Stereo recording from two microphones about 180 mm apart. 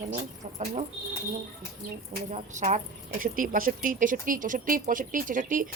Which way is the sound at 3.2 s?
50° right (ahead or behind).